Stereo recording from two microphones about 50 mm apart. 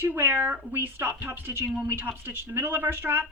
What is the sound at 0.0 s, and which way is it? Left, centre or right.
Speech, right.